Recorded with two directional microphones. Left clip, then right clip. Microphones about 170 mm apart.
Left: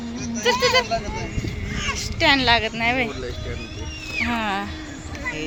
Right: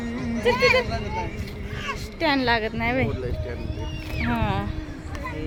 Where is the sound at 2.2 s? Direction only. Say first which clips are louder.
Left 5 dB; 10° right (ahead or behind).